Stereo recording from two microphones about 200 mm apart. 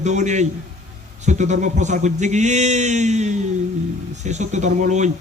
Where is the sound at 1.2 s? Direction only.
35° right (ahead or behind).